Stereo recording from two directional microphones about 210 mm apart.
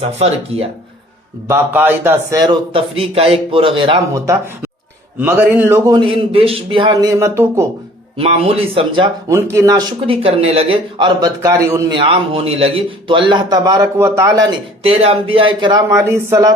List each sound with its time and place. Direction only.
1.5 s a man's voice: 10° right (ahead or behind)
8.2 s a man's voice: 30° right (ahead or behind)
9.3 s a man's voice: 10° right (ahead or behind)
14.8 s a man's voice: 25° right (ahead or behind)